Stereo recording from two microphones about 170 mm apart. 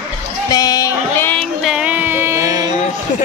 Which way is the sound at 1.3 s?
5° left (ahead or behind).